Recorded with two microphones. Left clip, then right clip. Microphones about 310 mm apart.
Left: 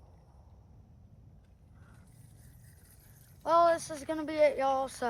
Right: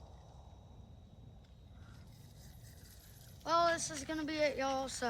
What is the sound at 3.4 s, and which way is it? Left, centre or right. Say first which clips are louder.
Speech: left 7 dB; centre.